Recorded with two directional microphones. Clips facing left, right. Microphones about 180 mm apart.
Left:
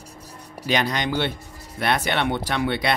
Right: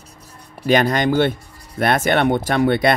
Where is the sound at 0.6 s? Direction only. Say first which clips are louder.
Right 7 dB; 50° right (ahead or behind).